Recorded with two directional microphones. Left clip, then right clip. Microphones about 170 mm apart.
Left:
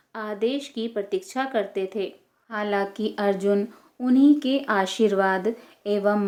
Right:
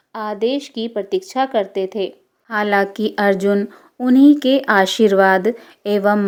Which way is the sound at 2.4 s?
55° right (ahead or behind).